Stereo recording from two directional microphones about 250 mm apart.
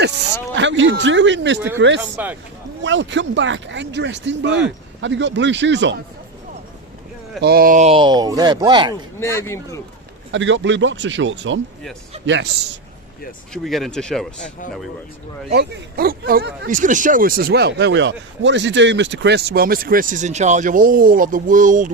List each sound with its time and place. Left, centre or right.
0.0 s speech: right
2.0 s speech: centre
2.8 s speech: right
7.4 s speech: right; by 9.0 s centre
9.2 s speech: centre
10.3 s speech: right
13.5 s speech: centre
15.5 s speech: right